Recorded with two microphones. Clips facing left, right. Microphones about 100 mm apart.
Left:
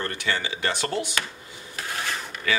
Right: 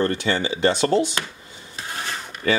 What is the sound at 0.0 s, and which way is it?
Speech, 30° right (ahead or behind).